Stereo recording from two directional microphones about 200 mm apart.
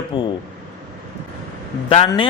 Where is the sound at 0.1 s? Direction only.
25° left (ahead or behind).